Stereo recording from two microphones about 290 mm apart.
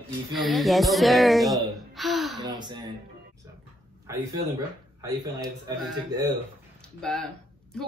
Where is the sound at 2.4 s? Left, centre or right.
Centre.